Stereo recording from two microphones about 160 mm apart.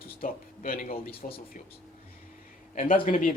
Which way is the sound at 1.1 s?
35° left (ahead or behind).